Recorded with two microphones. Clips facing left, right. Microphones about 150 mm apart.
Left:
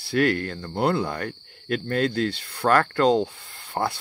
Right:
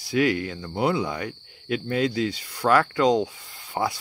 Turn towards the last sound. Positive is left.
turn(degrees=0)  # may be behind; listen again after turning